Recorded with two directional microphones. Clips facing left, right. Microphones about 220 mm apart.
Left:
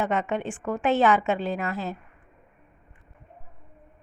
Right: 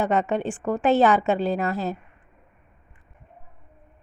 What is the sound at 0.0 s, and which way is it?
A woman's voice, 35° right (ahead or behind).